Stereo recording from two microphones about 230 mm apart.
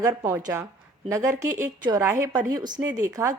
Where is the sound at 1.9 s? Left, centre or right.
Centre.